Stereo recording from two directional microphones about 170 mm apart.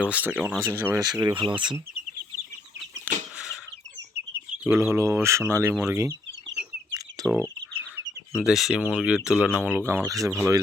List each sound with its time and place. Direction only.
0.1 s speech: 10° right (ahead or behind)
1.0 s speech: 25° right (ahead or behind)
3.3 s a sound: 5° right (ahead or behind)
4.6 s speech: 15° right (ahead or behind)
5.7 s speech: 5° right (ahead or behind)
7.2 s speech: 20° right (ahead or behind)
8.4 s speech: centre (ahead or behind)